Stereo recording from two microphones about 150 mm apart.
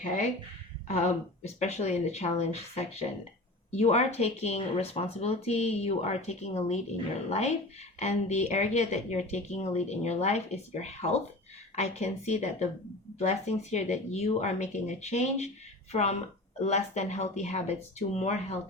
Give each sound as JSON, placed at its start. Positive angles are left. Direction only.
{"t": 0.0, "sound": "speech", "side_deg": 60}
{"t": 0.9, "sound": "speech", "side_deg": 50}